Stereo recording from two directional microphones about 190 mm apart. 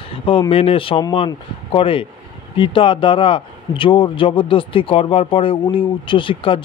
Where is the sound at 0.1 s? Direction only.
25° left (ahead or behind).